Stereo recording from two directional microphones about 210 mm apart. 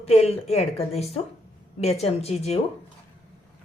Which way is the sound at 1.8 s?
30° left (ahead or behind).